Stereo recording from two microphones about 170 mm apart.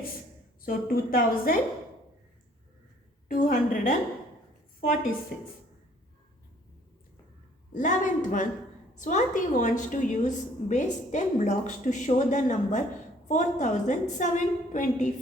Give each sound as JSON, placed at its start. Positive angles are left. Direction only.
{"t": 0.6, "sound": "a woman's voice", "side_deg": 55}
{"t": 3.2, "sound": "a woman's voice", "side_deg": 55}
{"t": 7.7, "sound": "a woman's voice", "side_deg": 50}